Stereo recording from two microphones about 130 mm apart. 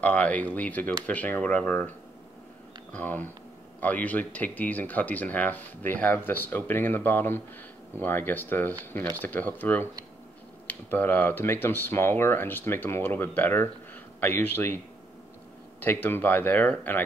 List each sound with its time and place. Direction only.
0.0 s speech: 10° left (ahead or behind)
15.8 s speech: 15° left (ahead or behind)